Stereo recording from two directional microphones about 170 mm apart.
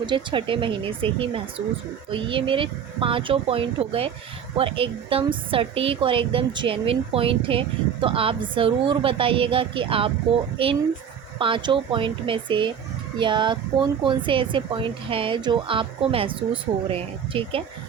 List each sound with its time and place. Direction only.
0.0 s a woman's voice: 30° right (ahead or behind)